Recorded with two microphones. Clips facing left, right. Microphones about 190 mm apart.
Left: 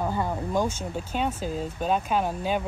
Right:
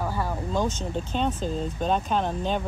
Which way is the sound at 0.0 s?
20° left (ahead or behind).